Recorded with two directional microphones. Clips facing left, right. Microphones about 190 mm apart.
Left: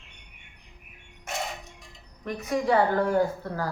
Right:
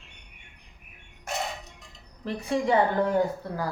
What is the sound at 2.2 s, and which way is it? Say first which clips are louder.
A woman's voice: even; 30° right (ahead or behind).